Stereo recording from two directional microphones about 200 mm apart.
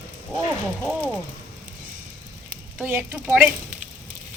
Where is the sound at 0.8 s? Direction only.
5° left (ahead or behind).